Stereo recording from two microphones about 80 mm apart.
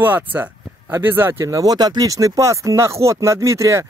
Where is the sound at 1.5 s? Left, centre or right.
Right.